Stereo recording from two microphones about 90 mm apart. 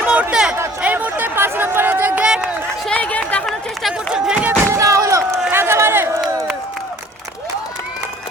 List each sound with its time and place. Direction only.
0.0 s a sound: 15° right (ahead or behind)
0.8 s music: 20° right (ahead or behind)
2.2 s run: 10° right (ahead or behind)
2.8 s run: 15° left (ahead or behind)
3.8 s run: 10° right (ahead or behind)
4.4 s a sound: 30° right (ahead or behind)
5.5 s run: 25° right (ahead or behind)